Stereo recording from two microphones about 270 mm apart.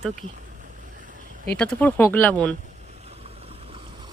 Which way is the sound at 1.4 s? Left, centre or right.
Centre.